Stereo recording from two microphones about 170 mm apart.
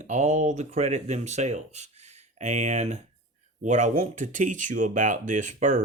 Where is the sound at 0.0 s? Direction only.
45° right (ahead or behind).